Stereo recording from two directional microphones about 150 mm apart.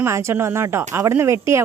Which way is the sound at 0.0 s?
20° right (ahead or behind).